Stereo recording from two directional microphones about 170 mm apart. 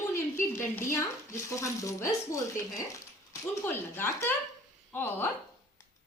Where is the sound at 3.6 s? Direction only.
15° left (ahead or behind).